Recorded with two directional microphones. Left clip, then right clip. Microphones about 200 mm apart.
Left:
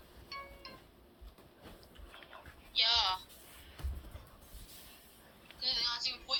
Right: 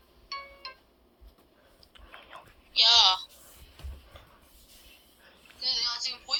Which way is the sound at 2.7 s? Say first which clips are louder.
Right 10 dB; 30° right (ahead or behind).